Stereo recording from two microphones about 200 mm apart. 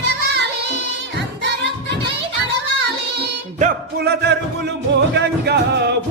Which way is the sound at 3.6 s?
50° right (ahead or behind).